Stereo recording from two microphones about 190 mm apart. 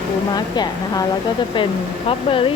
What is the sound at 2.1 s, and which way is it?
Speech, 30° left (ahead or behind).